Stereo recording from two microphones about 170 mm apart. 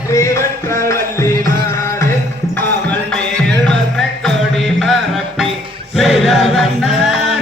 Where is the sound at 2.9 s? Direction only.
5° left (ahead or behind).